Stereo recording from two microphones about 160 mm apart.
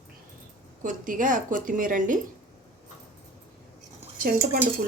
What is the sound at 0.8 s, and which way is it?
Speech, 55° right (ahead or behind).